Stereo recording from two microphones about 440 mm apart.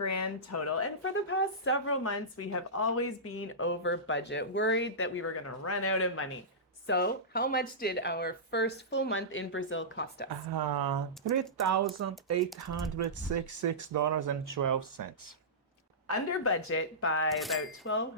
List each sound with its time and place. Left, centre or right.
0.0 s speech: left
10.2 s speech: right
16.0 s speech: left